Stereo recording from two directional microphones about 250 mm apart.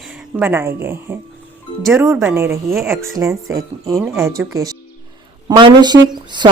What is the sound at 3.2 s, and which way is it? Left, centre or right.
Speech, centre.